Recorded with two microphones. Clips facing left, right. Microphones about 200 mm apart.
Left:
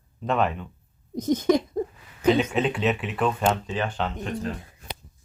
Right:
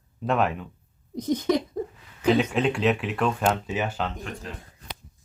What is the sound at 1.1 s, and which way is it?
Speech, 45° left (ahead or behind).